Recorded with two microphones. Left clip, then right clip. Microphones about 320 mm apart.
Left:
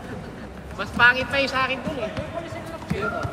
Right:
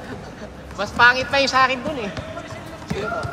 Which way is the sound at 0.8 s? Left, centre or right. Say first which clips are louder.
Right 3 dB; centre.